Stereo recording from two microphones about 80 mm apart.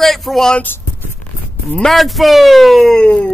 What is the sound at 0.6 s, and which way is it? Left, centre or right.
Speech, left.